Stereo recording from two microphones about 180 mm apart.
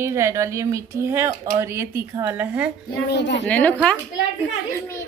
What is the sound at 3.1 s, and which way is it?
Speech, 75° left (ahead or behind).